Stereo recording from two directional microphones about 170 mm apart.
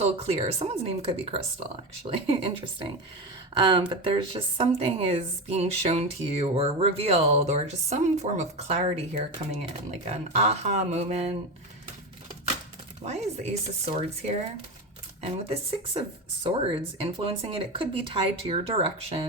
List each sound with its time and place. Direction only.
0.0 s a woman's voice: 35° right (ahead or behind)
10.1 s a woman's voice: 40° right (ahead or behind)
13.0 s a woman's voice: 40° right (ahead or behind)